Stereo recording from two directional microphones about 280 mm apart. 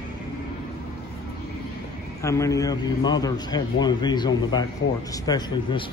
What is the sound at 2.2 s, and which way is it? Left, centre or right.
A man's voice, centre.